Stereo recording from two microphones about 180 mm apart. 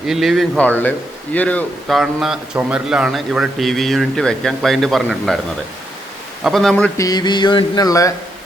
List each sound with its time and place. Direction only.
0.1 s speech: centre (ahead or behind)
6.4 s speech: centre (ahead or behind)
6.9 s a sound: 20° left (ahead or behind)